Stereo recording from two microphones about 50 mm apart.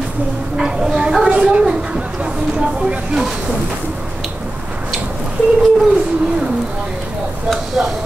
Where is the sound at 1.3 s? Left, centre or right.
Centre.